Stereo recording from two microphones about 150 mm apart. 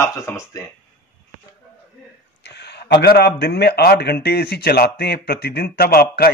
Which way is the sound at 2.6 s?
90° left.